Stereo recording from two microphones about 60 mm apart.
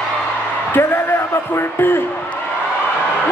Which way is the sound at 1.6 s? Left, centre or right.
Left.